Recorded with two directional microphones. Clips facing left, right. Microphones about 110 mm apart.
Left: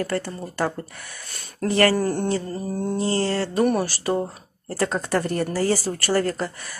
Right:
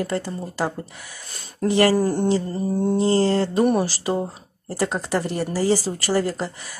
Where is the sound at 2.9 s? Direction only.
30° right (ahead or behind).